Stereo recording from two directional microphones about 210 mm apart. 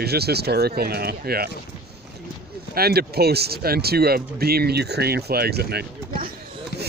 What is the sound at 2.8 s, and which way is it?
Speech, 45° right (ahead or behind).